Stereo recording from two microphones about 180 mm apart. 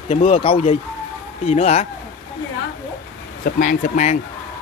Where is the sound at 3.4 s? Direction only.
50° left (ahead or behind).